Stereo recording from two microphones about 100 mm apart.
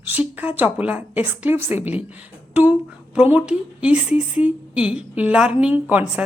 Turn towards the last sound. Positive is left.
turn(degrees=-15)  # may be behind; listen again after turning